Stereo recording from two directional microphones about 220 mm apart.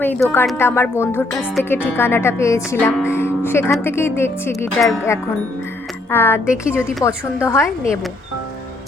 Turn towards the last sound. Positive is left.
turn(degrees=10)  # may be behind; listen again after turning